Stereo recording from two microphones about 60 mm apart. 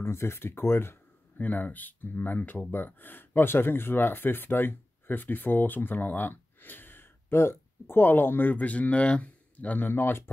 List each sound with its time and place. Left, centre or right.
0.0 s speech: left
1.4 s speech: left
9.8 s speech: left